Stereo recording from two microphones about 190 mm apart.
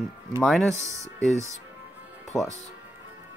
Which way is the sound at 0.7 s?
15° right (ahead or behind).